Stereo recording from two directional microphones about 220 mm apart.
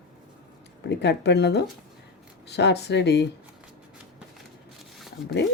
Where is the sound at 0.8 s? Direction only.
50° left (ahead or behind).